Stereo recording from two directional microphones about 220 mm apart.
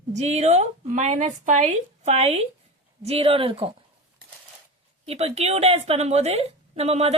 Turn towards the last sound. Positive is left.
turn(degrees=-30)  # may be behind; listen again after turning